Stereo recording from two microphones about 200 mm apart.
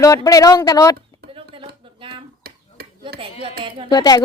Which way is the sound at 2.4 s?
50° right (ahead or behind).